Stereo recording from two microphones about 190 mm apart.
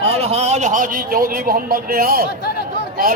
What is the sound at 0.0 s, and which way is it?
A man's voice, 35° right (ahead or behind).